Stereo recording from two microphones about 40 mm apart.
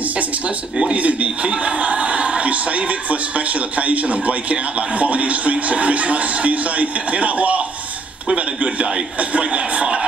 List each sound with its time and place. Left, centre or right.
0.9 s a man's voice: right
9.2 s speech: right
9.5 s a man's voice: right